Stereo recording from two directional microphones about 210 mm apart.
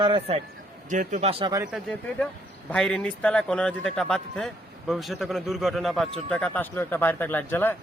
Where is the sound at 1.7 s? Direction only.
5° left (ahead or behind).